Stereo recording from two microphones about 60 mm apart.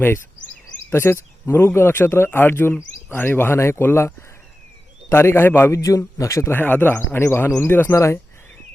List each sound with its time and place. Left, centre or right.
0.9 s speech: left
5.1 s a man's voice: left
5.7 s a man's voice: left
6.1 s speech: left
6.5 s speech: left
7.9 s a man's voice: left